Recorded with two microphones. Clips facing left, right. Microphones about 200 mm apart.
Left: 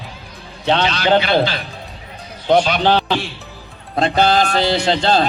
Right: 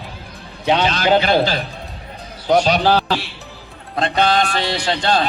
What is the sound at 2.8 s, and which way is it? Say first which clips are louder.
Speech: even; 5° right (ahead or behind).